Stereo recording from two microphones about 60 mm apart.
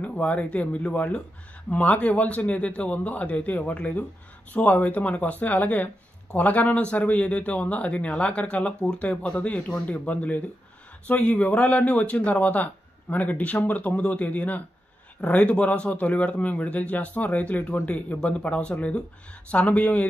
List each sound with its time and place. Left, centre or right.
0.0 s speech: left